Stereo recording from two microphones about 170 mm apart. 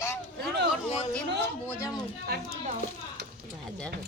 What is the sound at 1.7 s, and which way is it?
Speech, 15° left (ahead or behind).